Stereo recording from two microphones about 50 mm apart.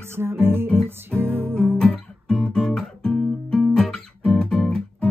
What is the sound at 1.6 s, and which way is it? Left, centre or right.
Music, centre.